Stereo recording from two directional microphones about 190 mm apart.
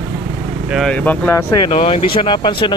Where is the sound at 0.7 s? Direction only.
Centre (ahead or behind).